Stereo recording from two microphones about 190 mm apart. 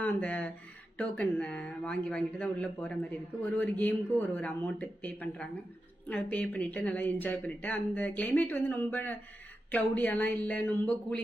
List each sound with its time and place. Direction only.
0.0 s a woman's voice: 10° left (ahead or behind)